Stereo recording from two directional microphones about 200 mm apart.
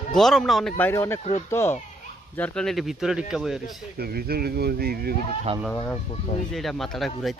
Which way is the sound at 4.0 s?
50° right (ahead or behind).